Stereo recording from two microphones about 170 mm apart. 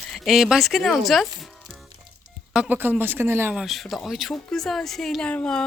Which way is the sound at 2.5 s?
10° right (ahead or behind).